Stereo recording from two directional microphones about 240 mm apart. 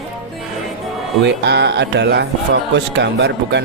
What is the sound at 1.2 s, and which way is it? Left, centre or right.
Speech, right.